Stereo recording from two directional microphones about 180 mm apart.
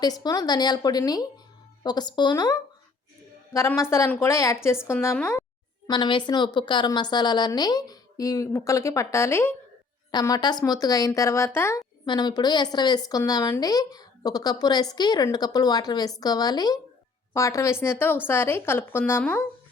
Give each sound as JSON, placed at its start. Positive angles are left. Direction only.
{"t": 0.0, "sound": "a woman's voice", "side_deg": 20}
{"t": 5.9, "sound": "a woman's voice", "side_deg": 25}